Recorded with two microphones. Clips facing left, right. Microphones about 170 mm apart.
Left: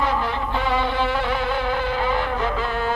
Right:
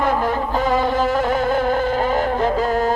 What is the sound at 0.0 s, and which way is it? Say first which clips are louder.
Music: right 4 dB; 45° right (ahead or behind).